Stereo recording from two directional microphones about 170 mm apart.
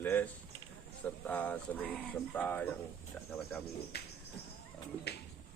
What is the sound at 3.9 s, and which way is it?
Bird, 75° left (ahead or behind).